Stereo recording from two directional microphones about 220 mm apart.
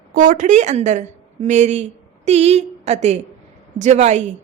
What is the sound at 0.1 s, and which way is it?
A woman's voice, 35° right (ahead or behind).